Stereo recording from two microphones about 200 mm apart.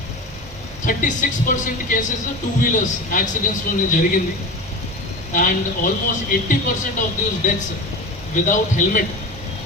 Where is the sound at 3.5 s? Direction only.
40° left (ahead or behind).